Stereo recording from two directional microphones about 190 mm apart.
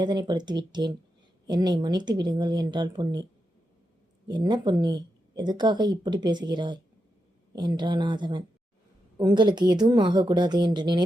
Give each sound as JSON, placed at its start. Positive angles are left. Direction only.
{"t": 0.0, "sound": "speech", "side_deg": -20}
{"t": 4.3, "sound": "speech", "side_deg": -25}